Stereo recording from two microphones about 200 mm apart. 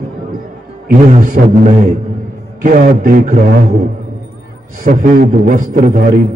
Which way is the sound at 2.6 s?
40° right (ahead or behind).